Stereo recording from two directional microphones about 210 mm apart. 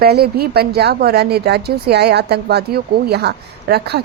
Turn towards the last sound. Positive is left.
turn(degrees=-50)  # may be behind; listen again after turning